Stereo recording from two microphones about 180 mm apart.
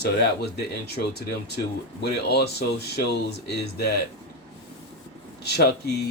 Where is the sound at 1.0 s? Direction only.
55° left (ahead or behind).